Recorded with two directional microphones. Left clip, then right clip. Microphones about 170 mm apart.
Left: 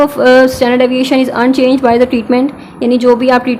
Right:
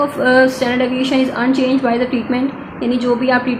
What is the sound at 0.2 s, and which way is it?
A woman's voice, 45° left (ahead or behind).